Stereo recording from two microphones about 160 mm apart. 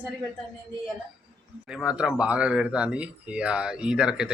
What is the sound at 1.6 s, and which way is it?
Speech, 5° right (ahead or behind).